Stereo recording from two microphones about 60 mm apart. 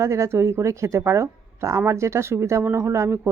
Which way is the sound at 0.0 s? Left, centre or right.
Right.